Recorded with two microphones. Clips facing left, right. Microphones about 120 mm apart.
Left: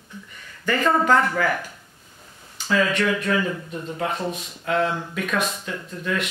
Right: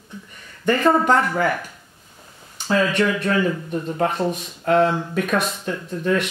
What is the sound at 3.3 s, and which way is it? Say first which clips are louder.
Speech: right 3 dB; 40° right (ahead or behind).